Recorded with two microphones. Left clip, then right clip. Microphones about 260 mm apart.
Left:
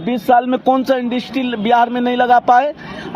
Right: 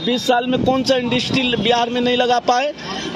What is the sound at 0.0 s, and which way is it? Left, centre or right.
A man's voice, left.